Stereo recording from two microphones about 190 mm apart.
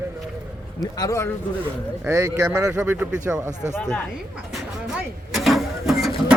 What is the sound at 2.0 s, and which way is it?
Speech, 15° right (ahead or behind).